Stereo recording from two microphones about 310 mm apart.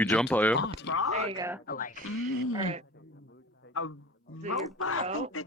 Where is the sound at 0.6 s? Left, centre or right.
Left.